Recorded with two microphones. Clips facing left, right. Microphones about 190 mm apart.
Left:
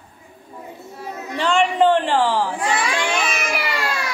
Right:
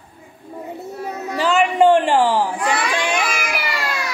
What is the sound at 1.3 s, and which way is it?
A man's voice, 5° right (ahead or behind).